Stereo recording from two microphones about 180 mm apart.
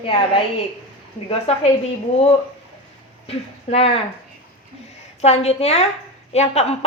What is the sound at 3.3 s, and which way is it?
Speech, 35° left (ahead or behind).